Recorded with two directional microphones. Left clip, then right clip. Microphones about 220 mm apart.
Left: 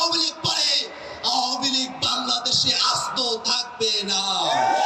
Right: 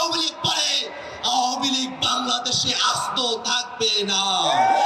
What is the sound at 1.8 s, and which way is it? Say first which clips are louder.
Music: right 1 dB; 70° right (ahead or behind).